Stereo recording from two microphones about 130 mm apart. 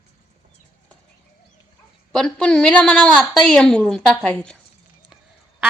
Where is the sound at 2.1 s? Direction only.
5° left (ahead or behind).